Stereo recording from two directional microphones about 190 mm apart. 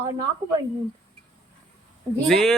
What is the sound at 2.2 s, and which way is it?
Speech, centre (ahead or behind).